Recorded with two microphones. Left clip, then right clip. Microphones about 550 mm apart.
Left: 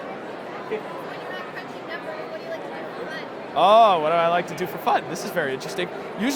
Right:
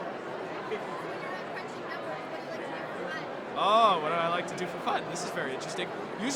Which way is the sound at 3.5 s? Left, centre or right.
Left.